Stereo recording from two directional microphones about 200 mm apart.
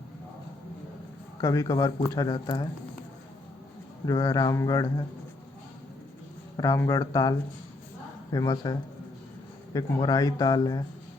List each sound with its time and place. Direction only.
1.4 s speech: 15° left (ahead or behind)
4.0 s speech: 15° left (ahead or behind)
6.6 s speech: 15° left (ahead or behind)